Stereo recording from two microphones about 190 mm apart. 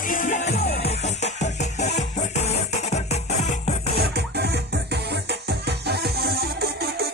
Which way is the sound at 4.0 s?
60° right (ahead or behind).